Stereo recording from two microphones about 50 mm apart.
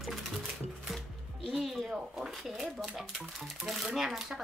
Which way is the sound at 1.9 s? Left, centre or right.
Centre.